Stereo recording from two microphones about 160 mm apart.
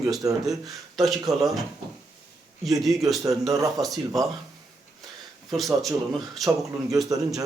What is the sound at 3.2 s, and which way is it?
Speech, 20° right (ahead or behind).